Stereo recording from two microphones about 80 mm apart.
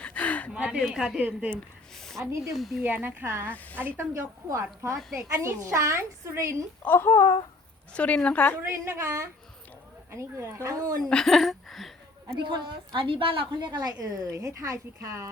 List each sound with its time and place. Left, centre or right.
0.0 s a sound: centre
0.5 s speech: centre
1.2 s speech: centre
2.5 s speech: centre
2.8 s speech: right
3.5 s a woman's voice: centre
4.1 s a woman's voice: right
5.1 s a woman's voice: right
6.8 s speech: left
7.9 s a woman's voice: centre
8.6 s a woman's voice: right
11.1 s speech: centre
12.4 s a woman's voice: right